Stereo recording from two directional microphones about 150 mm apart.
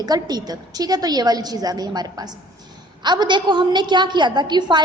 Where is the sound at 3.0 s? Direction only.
30° right (ahead or behind).